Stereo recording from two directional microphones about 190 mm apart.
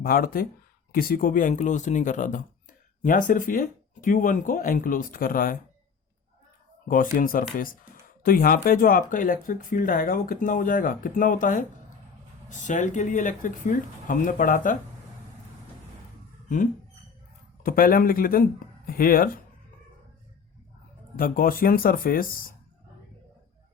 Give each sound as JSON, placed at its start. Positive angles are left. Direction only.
{"t": 0.0, "sound": "speech", "side_deg": 50}
{"t": 6.8, "sound": "speech", "side_deg": 45}
{"t": 17.6, "sound": "speech", "side_deg": 50}
{"t": 21.2, "sound": "speech", "side_deg": 50}